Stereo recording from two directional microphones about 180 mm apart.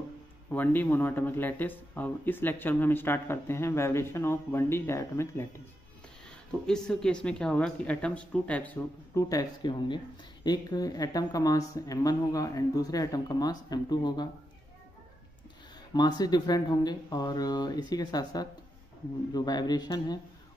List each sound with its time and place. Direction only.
0.5 s speech: 10° left (ahead or behind)
6.6 s speech: 5° left (ahead or behind)
9.3 s speech: 20° left (ahead or behind)
15.9 s speech: 25° left (ahead or behind)